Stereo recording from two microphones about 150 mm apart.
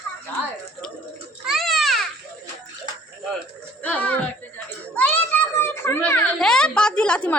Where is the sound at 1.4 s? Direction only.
Centre (ahead or behind).